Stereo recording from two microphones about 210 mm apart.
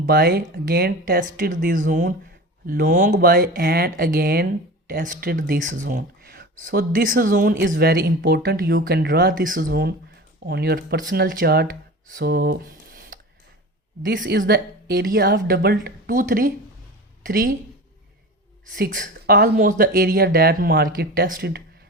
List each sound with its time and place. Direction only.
0.0 s speech: 50° right (ahead or behind)
5.8 s speech: 50° right (ahead or behind)
14.2 s a woman's voice: 50° right (ahead or behind)
18.8 s speech: 45° right (ahead or behind)